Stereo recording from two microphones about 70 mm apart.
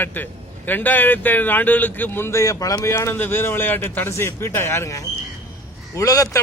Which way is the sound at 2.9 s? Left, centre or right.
Left.